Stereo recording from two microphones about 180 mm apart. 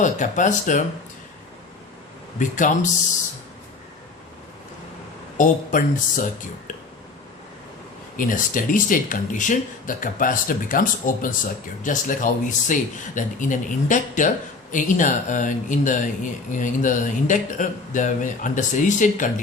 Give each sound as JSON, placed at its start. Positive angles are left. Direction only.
{"t": 0.0, "sound": "speech", "side_deg": 45}
{"t": 2.4, "sound": "speech", "side_deg": 45}
{"t": 5.4, "sound": "speech", "side_deg": 45}
{"t": 8.1, "sound": "speech", "side_deg": 50}